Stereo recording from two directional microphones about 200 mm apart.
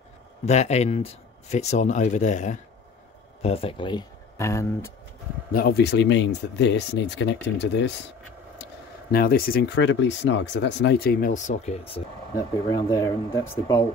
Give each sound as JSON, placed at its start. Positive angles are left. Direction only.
{"t": 0.5, "sound": "speech", "side_deg": 35}
{"t": 5.5, "sound": "speech", "side_deg": 50}
{"t": 9.1, "sound": "speech", "side_deg": 50}
{"t": 12.7, "sound": "speech", "side_deg": 15}